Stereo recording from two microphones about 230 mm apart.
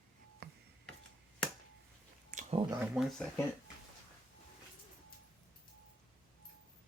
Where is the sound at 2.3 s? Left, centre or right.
Right.